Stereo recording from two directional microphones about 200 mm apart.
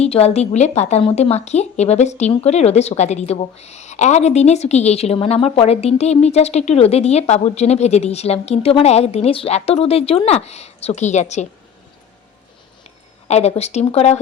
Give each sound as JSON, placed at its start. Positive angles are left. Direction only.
{"t": 0.0, "sound": "a woman's voice", "side_deg": 30}
{"t": 13.2, "sound": "a woman's voice", "side_deg": 35}